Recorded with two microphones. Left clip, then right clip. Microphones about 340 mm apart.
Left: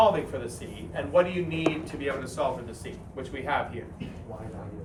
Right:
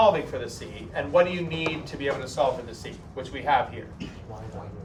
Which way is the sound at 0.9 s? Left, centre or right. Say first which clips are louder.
Right 2 dB; right.